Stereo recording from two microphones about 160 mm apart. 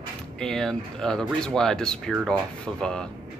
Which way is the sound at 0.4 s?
5° left (ahead or behind).